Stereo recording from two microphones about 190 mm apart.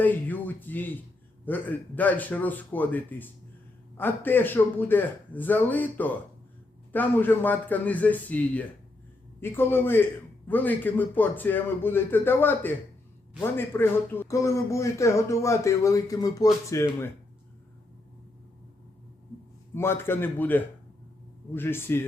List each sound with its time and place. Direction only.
0.0 s speech: 10° left (ahead or behind)
19.7 s speech: 10° left (ahead or behind)